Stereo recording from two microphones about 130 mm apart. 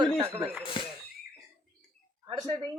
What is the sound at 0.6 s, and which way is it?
Speech, 40° left (ahead or behind).